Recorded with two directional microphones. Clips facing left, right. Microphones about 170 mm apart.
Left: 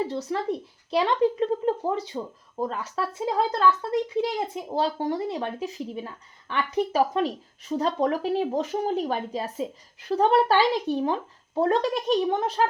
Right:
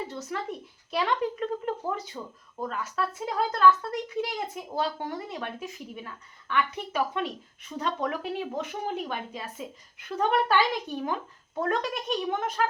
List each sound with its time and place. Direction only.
0.1 s speech: 30° left (ahead or behind)